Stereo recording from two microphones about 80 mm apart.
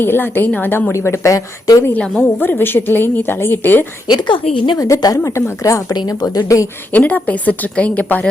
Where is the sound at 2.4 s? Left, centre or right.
Left.